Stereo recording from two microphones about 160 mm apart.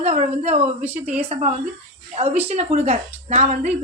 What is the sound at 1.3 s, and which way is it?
A woman's voice, 45° right (ahead or behind).